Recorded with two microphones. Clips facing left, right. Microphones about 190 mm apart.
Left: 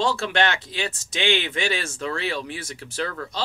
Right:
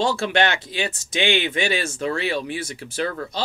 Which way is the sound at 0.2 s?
15° right (ahead or behind).